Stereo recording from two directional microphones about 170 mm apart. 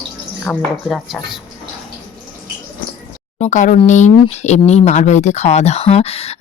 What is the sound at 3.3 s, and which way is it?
Speech, 45° left (ahead or behind).